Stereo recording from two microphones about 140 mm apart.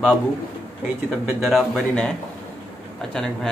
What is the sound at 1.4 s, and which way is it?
Speech, centre (ahead or behind).